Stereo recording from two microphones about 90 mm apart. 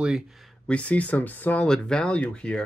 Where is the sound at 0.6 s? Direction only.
15° left (ahead or behind).